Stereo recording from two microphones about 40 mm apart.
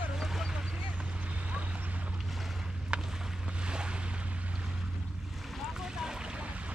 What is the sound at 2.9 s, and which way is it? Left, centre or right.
Boat, right.